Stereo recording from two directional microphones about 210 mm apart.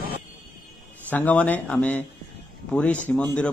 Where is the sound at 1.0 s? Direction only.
10° left (ahead or behind).